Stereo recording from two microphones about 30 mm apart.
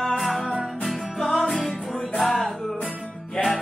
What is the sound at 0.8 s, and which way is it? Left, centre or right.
Music, centre.